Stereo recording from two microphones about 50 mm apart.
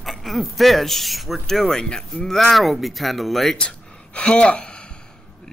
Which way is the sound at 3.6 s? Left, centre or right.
Centre.